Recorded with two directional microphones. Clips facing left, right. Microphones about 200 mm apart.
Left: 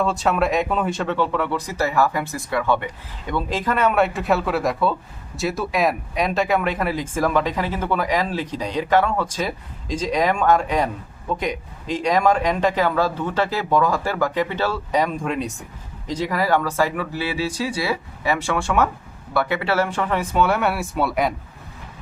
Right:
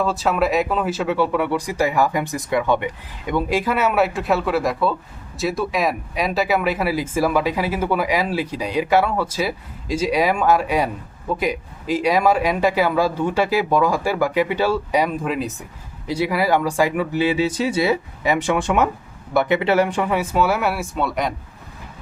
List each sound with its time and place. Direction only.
0.0 s speech: centre (ahead or behind)